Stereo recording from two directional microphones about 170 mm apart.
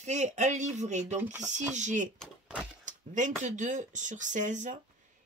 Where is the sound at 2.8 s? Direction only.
45° right (ahead or behind).